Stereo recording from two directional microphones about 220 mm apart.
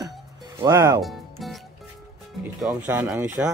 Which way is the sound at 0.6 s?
15° right (ahead or behind).